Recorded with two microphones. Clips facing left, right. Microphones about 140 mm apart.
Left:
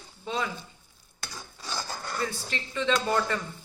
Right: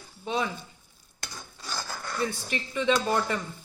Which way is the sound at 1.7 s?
20° left (ahead or behind).